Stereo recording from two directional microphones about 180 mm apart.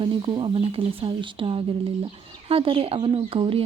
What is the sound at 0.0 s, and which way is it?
A woman's voice, 25° right (ahead or behind).